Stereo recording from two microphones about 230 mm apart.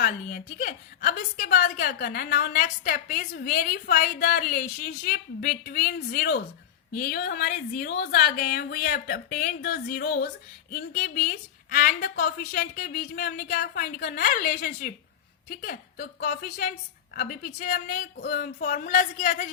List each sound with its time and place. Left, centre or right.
0.0 s a woman's voice: left